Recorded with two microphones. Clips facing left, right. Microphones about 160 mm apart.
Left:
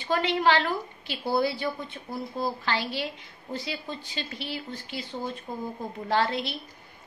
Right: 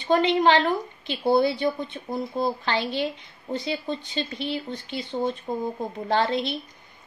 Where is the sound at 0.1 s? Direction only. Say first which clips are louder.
Right 5 dB; 25° right (ahead or behind).